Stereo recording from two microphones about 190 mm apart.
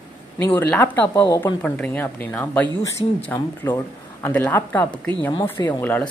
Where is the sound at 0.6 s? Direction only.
10° left (ahead or behind).